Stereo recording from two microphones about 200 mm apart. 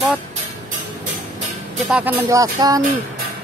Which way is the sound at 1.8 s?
5° right (ahead or behind).